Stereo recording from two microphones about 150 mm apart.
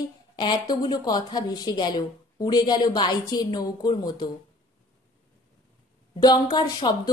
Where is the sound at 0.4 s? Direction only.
30° left (ahead or behind).